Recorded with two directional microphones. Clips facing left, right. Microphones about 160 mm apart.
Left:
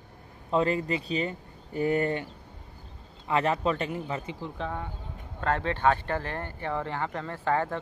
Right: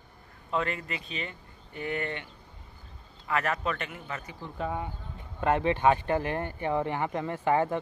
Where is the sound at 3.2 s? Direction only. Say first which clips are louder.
Left 4 dB; 25° left (ahead or behind).